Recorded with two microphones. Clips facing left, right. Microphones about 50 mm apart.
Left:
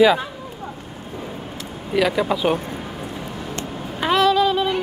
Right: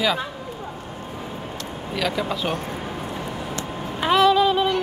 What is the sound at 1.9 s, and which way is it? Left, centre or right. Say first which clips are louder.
Speech: left 6 dB; centre.